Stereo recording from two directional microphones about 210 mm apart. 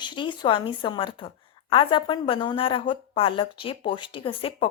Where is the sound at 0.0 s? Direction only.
20° left (ahead or behind).